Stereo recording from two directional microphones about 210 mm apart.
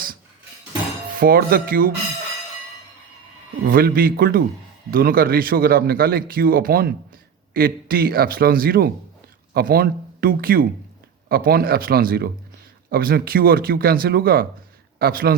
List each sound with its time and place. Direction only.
1.2 s speech: 45° right (ahead or behind)
3.7 s a man's voice: 45° right (ahead or behind)